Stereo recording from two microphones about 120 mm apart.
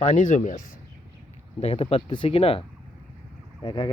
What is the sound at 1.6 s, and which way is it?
Speech, 55° left (ahead or behind).